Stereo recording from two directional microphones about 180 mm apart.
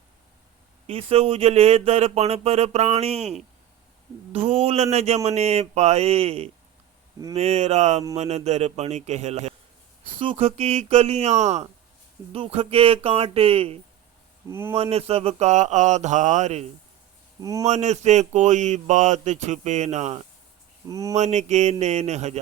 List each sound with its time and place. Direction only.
0.9 s speech: 30° right (ahead or behind)
4.3 s speech: 35° right (ahead or behind)
14.4 s speech: 15° right (ahead or behind)
14.8 s speech: 35° right (ahead or behind)
17.4 s speech: 20° right (ahead or behind)
17.7 s speech: 40° right (ahead or behind)
20.8 s speech: 20° right (ahead or behind)
21.2 s speech: 40° right (ahead or behind)